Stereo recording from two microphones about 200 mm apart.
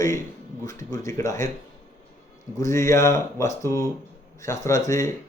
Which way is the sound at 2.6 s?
15° left (ahead or behind).